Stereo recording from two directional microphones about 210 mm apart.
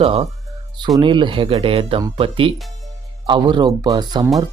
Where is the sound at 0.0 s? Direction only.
25° right (ahead or behind).